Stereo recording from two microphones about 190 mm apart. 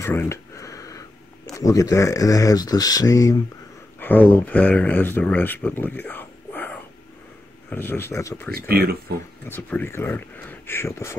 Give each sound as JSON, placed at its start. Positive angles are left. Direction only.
{"t": 0.0, "sound": "speech", "side_deg": 15}
{"t": 8.5, "sound": "speech", "side_deg": -55}
{"t": 9.5, "sound": "speech", "side_deg": 10}